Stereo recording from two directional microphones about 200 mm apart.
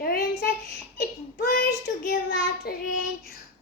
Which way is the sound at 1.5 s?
45° left (ahead or behind).